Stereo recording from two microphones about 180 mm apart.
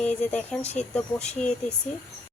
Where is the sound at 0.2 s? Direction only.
5° left (ahead or behind).